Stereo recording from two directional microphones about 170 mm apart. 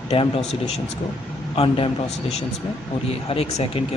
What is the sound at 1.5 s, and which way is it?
Speech, 35° left (ahead or behind).